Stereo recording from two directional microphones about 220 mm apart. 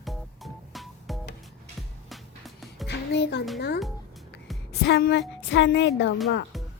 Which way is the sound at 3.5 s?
50° left (ahead or behind).